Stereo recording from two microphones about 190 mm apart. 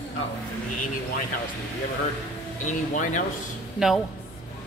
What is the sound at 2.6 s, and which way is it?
Speech, 40° left (ahead or behind).